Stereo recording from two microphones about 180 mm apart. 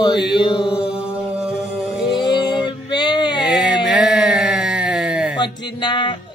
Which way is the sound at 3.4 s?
5° right (ahead or behind).